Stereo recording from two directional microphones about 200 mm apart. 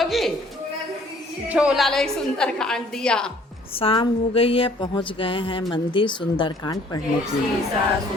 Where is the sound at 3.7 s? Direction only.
25° left (ahead or behind).